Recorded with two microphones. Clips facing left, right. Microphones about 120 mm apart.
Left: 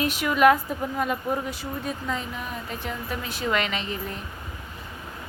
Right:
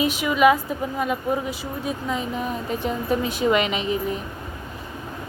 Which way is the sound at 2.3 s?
25° right (ahead or behind).